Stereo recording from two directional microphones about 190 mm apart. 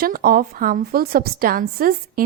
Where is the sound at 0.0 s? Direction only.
50° right (ahead or behind).